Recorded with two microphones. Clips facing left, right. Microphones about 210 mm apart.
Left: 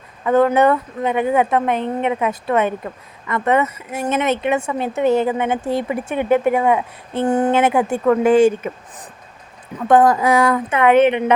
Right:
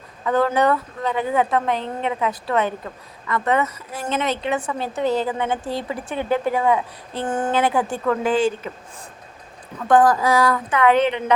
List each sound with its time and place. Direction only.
0.3 s a woman's voice: 20° left (ahead or behind)
8.2 s speech: 65° left (ahead or behind)
9.9 s a woman's voice: 25° left (ahead or behind)